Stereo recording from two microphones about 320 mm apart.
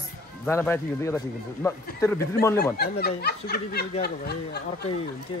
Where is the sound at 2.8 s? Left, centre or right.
Left.